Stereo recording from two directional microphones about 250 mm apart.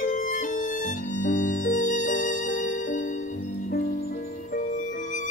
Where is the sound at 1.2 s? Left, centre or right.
Left.